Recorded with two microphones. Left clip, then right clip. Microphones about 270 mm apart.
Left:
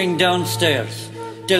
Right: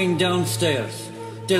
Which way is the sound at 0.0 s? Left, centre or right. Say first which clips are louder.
Left 4 dB; left.